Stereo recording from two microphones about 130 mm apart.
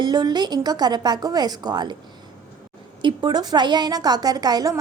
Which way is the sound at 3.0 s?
35° right (ahead or behind).